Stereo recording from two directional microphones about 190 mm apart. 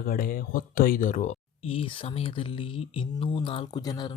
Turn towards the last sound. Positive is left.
turn(degrees=20)  # may be behind; listen again after turning